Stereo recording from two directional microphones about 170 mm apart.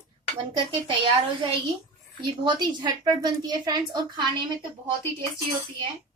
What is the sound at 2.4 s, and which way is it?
A woman's voice, 25° right (ahead or behind).